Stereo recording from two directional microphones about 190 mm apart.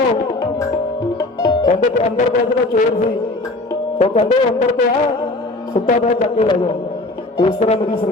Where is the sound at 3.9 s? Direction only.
30° left (ahead or behind).